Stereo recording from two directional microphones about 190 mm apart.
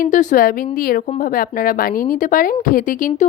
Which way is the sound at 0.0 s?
40° left (ahead or behind).